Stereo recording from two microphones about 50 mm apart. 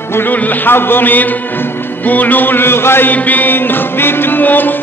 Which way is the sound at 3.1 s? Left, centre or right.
Left.